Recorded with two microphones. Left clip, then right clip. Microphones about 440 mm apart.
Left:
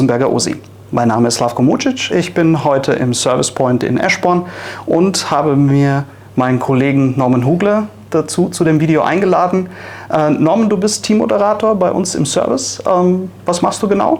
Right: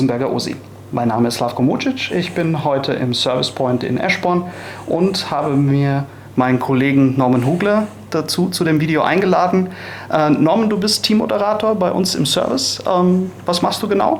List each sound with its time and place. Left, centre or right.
0.0 s speech: left